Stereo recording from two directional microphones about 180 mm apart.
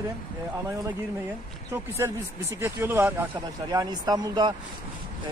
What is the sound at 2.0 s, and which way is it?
Speech, 20° right (ahead or behind).